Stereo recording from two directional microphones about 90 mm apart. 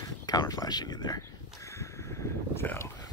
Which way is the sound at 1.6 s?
35° left (ahead or behind).